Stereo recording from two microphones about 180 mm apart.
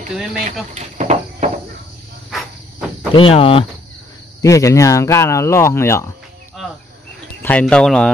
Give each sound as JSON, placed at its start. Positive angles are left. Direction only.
{"t": 0.1, "sound": "speech", "side_deg": -5}
{"t": 0.7, "sound": "a sound", "side_deg": -40}
{"t": 3.2, "sound": "speech", "side_deg": 30}
{"t": 4.4, "sound": "speech", "side_deg": 20}
{"t": 7.4, "sound": "speech", "side_deg": 5}